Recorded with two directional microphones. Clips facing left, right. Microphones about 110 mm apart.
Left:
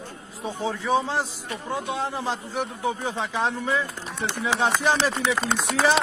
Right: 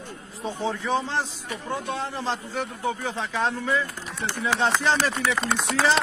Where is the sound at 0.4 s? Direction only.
5° left (ahead or behind).